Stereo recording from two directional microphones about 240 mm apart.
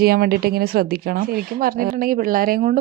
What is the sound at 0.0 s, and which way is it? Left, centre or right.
Speech, right.